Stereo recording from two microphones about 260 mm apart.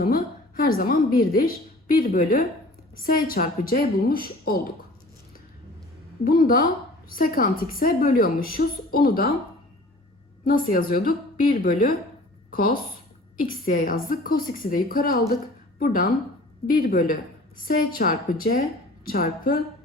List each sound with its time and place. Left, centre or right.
0.0 s a woman's voice: left
6.2 s a woman's voice: left
10.4 s a woman's voice: left
16.6 s a woman's voice: left